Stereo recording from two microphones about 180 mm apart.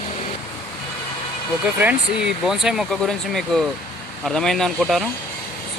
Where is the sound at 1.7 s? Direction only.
5° right (ahead or behind).